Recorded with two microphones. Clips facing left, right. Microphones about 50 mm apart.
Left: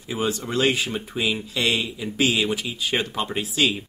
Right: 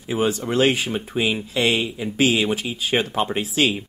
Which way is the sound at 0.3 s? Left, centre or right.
Right.